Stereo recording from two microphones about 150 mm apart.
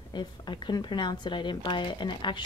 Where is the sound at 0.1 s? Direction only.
30° left (ahead or behind).